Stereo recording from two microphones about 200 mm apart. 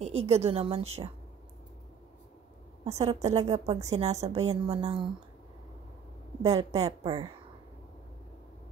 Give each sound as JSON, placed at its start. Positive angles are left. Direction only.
{"t": 0.0, "sound": "a woman's voice", "side_deg": -30}
{"t": 2.8, "sound": "a woman's voice", "side_deg": -30}
{"t": 6.5, "sound": "a woman's voice", "side_deg": -25}